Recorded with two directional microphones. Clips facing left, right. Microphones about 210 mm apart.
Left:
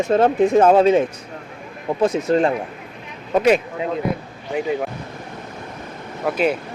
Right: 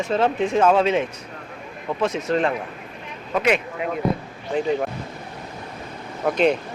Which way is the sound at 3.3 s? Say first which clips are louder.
Left 5 dB; 35° left (ahead or behind).